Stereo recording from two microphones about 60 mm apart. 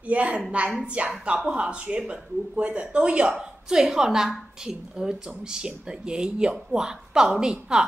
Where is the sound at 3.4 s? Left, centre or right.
Centre.